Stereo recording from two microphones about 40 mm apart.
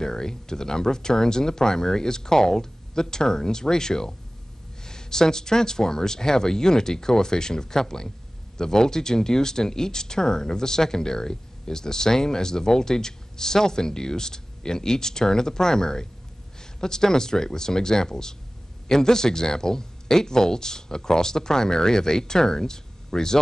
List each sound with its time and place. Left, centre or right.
0.0 s speech: centre